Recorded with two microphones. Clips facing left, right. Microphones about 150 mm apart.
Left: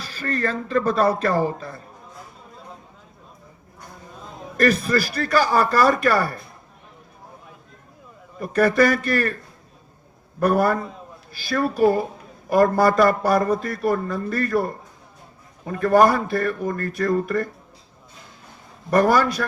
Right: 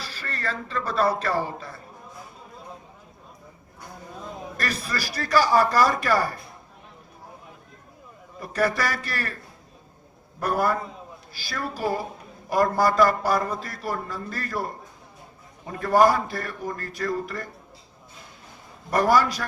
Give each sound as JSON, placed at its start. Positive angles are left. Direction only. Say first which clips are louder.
{"t": 0.0, "sound": "a man's voice", "louder": "left 8 dB", "side_deg": 45}
{"t": 4.5, "sound": "a man's voice", "louder": "left 12 dB", "side_deg": 50}
{"t": 8.4, "sound": "a man's voice", "louder": "left 7 dB", "side_deg": 55}
{"t": 10.4, "sound": "a man's voice", "louder": "left 5 dB", "side_deg": 55}
{"t": 15.6, "sound": "a man's voice", "louder": "left 3 dB", "side_deg": 55}
{"t": 18.9, "sound": "a man's voice", "louder": "left 3 dB", "side_deg": 55}